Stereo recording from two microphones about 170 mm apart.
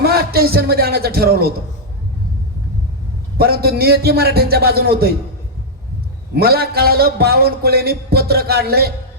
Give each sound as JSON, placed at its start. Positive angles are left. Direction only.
{"t": 0.0, "sound": "a man's voice", "side_deg": -65}
{"t": 3.3, "sound": "a man's voice", "side_deg": -65}
{"t": 6.3, "sound": "a man's voice", "side_deg": -65}